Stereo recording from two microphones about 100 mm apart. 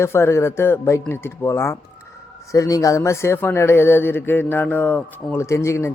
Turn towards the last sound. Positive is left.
turn(degrees=30)  # may be behind; listen again after turning